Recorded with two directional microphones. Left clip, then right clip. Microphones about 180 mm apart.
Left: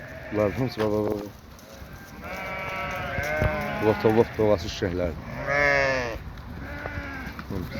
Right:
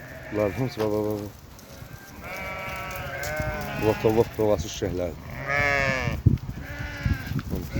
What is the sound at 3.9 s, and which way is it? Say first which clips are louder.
Speech: left 1 dB; 15° right (ahead or behind).